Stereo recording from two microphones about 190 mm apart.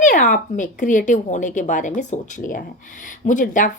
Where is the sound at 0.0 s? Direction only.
45° left (ahead or behind).